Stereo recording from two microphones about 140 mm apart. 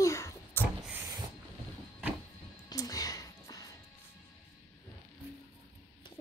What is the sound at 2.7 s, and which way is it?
Music, 25° left (ahead or behind).